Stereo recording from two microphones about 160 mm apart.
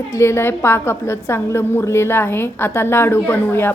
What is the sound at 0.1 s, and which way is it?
A woman's voice, 15° left (ahead or behind).